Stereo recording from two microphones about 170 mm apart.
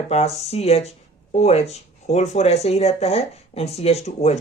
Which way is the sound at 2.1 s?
40° left (ahead or behind).